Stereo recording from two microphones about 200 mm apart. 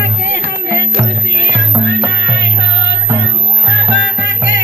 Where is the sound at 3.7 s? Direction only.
70° right (ahead or behind).